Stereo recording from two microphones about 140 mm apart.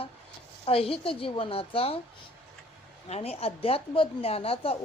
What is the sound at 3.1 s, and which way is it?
Speech, 45° left (ahead or behind).